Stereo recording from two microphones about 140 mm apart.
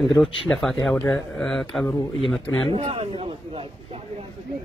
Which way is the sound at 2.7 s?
40° right (ahead or behind).